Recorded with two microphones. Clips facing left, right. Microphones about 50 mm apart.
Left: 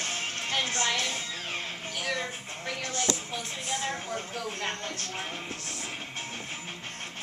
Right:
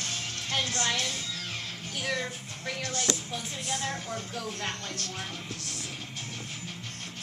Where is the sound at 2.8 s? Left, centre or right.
Left.